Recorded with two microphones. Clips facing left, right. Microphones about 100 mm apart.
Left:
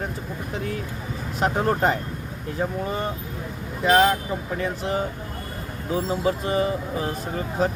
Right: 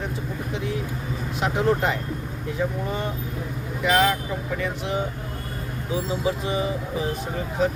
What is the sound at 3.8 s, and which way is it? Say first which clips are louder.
Speech: left 3 dB; 30° left (ahead or behind).